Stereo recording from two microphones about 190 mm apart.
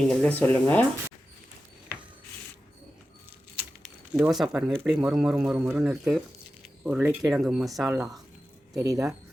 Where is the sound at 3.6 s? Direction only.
5° right (ahead or behind).